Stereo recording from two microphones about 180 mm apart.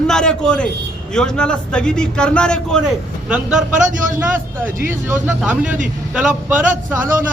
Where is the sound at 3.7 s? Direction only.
45° right (ahead or behind).